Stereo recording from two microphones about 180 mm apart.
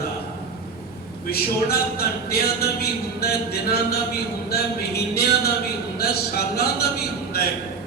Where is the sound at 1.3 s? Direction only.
60° left (ahead or behind).